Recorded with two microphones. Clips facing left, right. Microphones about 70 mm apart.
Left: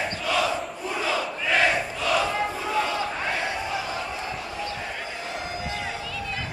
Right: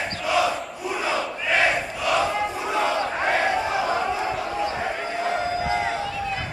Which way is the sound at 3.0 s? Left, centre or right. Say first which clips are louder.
Right 6 dB; right.